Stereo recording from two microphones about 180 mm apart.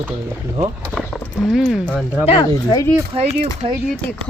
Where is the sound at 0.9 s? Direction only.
5° left (ahead or behind).